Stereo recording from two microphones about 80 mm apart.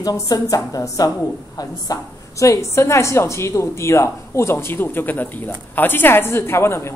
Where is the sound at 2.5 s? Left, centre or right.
Left.